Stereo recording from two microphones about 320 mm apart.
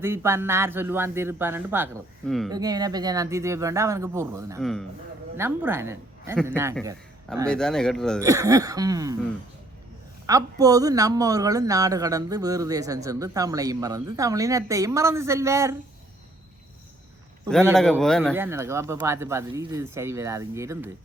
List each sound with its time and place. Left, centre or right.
0.0 s speech: centre
2.5 s speech: centre
4.6 s a man's voice: centre
7.4 s a man's voice: centre
8.2 s speech: centre
10.2 s speech: centre
17.5 s a man's voice: centre
18.4 s speech: centre